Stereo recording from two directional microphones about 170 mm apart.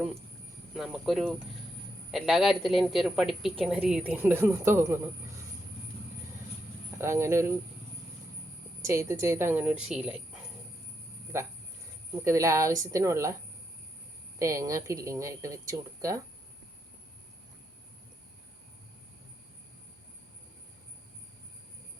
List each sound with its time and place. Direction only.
0.7 s a woman's voice: centre (ahead or behind)
7.0 s a woman's voice: 15° right (ahead or behind)
8.8 s a woman's voice: 15° right (ahead or behind)
12.2 s a woman's voice: 15° right (ahead or behind)
14.3 s speech: 20° right (ahead or behind)